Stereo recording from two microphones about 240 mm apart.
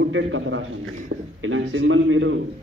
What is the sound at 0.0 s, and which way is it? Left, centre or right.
A man's voice, right.